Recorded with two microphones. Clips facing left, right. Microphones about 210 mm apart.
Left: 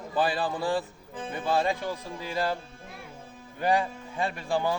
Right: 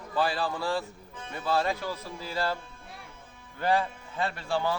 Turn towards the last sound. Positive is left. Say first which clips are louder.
# left 1 dB
turn(degrees=15)  # may be behind; listen again after turning